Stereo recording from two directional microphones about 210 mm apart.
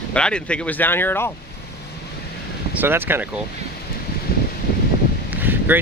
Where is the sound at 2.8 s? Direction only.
10° right (ahead or behind).